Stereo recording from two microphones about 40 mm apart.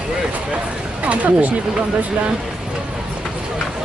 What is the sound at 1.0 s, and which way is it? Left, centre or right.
Speech, right.